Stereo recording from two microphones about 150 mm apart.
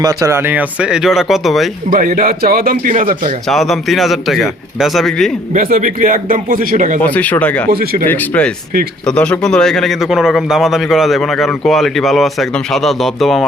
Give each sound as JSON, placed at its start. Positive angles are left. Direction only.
{"t": 0.0, "sound": "a man's voice", "side_deg": -20}
{"t": 1.9, "sound": "a man's voice", "side_deg": -60}
{"t": 3.5, "sound": "a man's voice", "side_deg": 0}
{"t": 5.5, "sound": "speech", "side_deg": -65}
{"t": 7.0, "sound": "speech", "side_deg": 10}
{"t": 7.7, "sound": "speech", "side_deg": -90}
{"t": 8.0, "sound": "a man's voice", "side_deg": 10}